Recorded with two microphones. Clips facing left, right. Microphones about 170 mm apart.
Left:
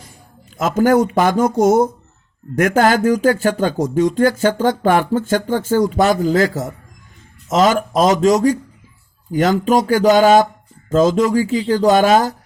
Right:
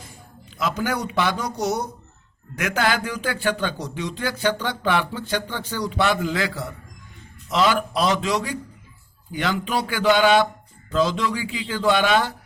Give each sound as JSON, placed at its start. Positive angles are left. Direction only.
{"t": 0.5, "sound": "speech", "side_deg": 45}